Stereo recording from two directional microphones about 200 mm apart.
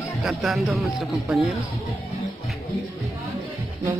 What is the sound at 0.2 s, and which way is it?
Speech, centre (ahead or behind).